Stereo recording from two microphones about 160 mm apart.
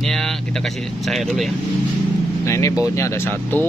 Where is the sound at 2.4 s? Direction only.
20° left (ahead or behind).